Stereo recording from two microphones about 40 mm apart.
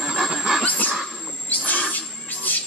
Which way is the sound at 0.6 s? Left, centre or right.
Left.